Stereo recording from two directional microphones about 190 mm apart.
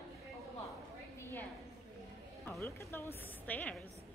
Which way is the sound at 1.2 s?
10° left (ahead or behind).